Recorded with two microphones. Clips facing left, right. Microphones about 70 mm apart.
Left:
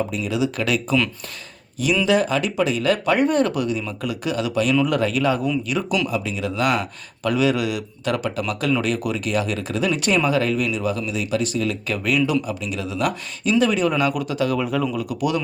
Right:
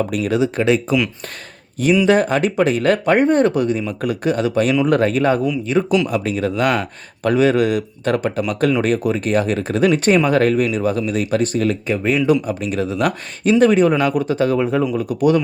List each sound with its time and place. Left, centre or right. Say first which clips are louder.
0.1 s speech: right 6 dB; right
0.3 s speech: right 5 dB; right
2.0 s speech: right 4 dB; right
6.1 s speech: right 5 dB; right
11.9 s speech: right 5 dB; right